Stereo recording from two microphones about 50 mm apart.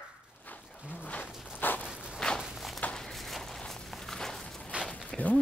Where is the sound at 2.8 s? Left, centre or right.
Left.